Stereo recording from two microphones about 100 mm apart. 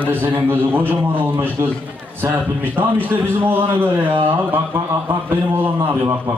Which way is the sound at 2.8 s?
20° right (ahead or behind).